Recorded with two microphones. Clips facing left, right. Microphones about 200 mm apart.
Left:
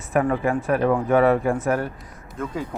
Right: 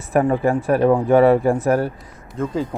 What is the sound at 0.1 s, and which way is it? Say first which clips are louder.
Speech: right 4 dB; 35° right (ahead or behind).